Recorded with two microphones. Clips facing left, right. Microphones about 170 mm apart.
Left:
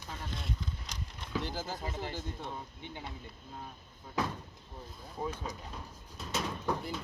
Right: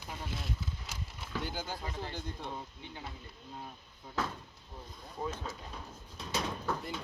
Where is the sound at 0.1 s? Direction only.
5° right (ahead or behind).